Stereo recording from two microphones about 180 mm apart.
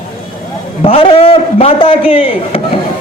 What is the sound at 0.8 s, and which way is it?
A man's voice, 30° left (ahead or behind).